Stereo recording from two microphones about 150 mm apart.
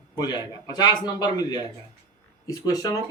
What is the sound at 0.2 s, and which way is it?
Speech, 25° left (ahead or behind).